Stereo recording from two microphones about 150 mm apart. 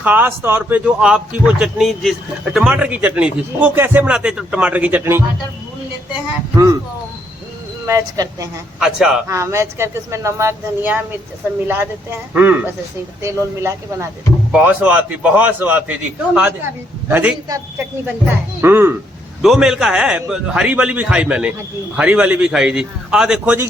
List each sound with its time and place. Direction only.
0.0 s speech: 10° right (ahead or behind)
7.9 s speech: 20° right (ahead or behind)
8.8 s a man's voice: 5° right (ahead or behind)
9.2 s speech: 20° right (ahead or behind)
12.3 s speech: 10° right (ahead or behind)
19.4 s a man's voice: 5° right (ahead or behind)